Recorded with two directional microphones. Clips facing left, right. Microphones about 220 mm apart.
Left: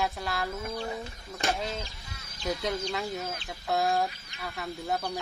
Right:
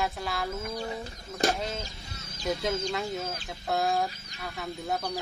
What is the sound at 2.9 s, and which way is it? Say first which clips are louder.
Speech: right 1 dB; centre (ahead or behind).